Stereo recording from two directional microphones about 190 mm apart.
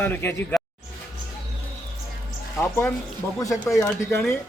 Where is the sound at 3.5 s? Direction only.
Centre (ahead or behind).